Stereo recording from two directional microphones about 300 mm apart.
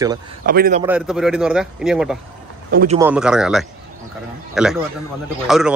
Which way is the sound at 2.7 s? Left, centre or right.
Right.